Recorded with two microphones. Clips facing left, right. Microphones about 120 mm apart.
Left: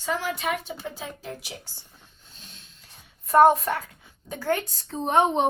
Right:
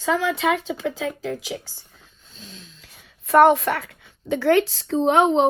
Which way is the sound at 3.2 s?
85° right.